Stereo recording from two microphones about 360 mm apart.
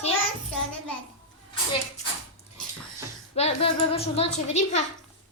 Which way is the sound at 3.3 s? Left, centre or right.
Centre.